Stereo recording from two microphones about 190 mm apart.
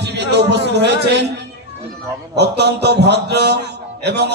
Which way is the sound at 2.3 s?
60° right (ahead or behind).